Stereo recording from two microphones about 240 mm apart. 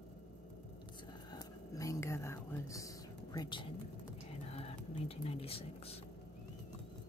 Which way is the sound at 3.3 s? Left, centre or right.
Centre.